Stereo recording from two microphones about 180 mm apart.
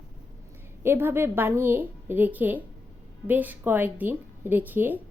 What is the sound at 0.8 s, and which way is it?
A woman's voice, 10° right (ahead or behind).